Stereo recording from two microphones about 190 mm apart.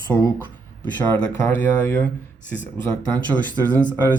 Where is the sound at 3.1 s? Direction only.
10° left (ahead or behind).